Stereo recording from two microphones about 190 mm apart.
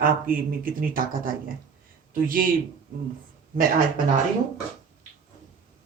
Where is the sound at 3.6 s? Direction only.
45° right (ahead or behind).